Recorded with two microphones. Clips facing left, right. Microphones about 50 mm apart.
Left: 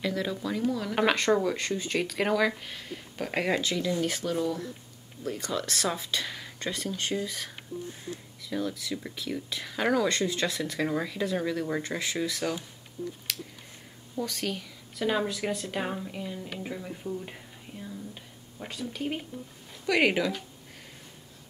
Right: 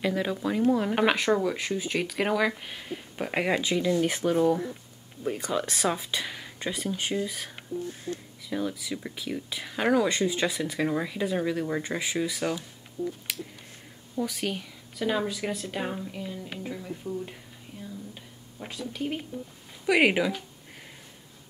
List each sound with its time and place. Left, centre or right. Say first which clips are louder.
0.0 s speech: right 3 dB; centre
0.9 s speech: right 1 dB; centre
13.3 s a sound: right 1 dB; centre
14.1 s speech: right 2 dB; centre
15.0 s speech: even; centre
18.1 s speech: even; centre
19.9 s speech: right 2 dB; centre